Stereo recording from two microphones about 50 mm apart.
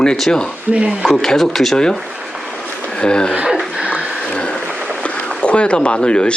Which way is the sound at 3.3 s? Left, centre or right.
Centre.